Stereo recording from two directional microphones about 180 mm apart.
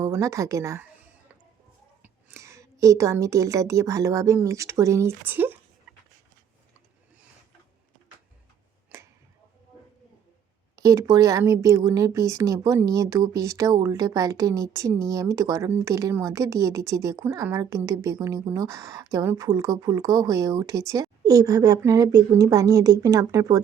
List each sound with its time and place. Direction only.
0.0 s speech: 15° right (ahead or behind)
2.0 s a woman's voice: 15° right (ahead or behind)
10.8 s speech: 20° right (ahead or behind)